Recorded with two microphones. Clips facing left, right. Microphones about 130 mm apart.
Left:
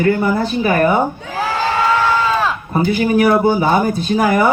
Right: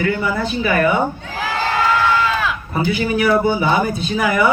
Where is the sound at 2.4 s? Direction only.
35° left (ahead or behind).